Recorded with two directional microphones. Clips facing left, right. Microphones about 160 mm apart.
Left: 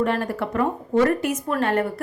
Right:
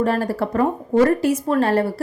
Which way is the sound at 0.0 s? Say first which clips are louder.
Right 3 dB; 35° right (ahead or behind).